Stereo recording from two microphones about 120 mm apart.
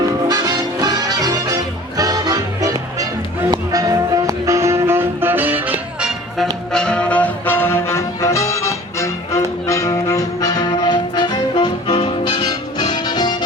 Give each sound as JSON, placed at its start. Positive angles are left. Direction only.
{"t": 0.0, "sound": "music", "side_deg": -30}